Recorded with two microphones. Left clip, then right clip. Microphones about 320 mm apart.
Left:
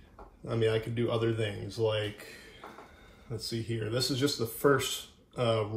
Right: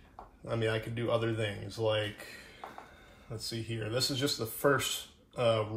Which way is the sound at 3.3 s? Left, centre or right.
Centre.